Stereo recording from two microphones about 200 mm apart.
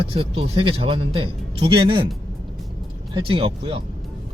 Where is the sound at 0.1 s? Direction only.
25° right (ahead or behind).